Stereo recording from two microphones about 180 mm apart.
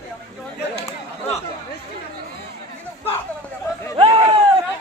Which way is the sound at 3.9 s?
30° right (ahead or behind).